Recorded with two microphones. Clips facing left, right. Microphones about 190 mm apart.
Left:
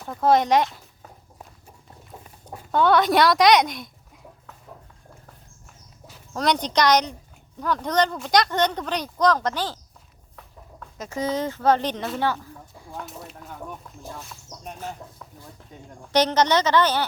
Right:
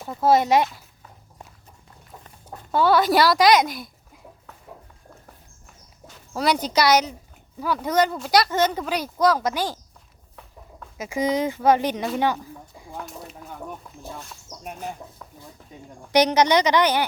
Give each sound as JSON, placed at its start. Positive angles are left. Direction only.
{"t": 0.0, "sound": "speech", "side_deg": -5}
{"t": 2.2, "sound": "chicken", "side_deg": 10}
{"t": 2.7, "sound": "speech", "side_deg": -5}
{"t": 6.3, "sound": "speech", "side_deg": -5}
{"t": 10.3, "sound": "a sound", "side_deg": -10}
{"t": 12.1, "sound": "speech", "side_deg": -15}
{"t": 13.0, "sound": "speech", "side_deg": 0}
{"t": 14.6, "sound": "speech", "side_deg": -10}
{"t": 16.0, "sound": "speech", "side_deg": -10}